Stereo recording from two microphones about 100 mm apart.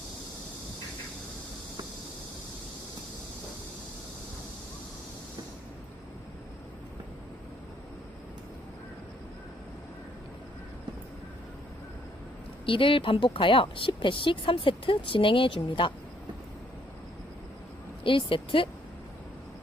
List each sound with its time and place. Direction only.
12.6 s speech: 60° left (ahead or behind)
18.0 s speech: 60° left (ahead or behind)